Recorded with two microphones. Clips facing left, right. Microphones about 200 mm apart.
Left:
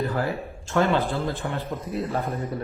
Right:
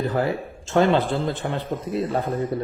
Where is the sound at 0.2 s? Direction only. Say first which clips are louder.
Right 4 dB; 20° right (ahead or behind).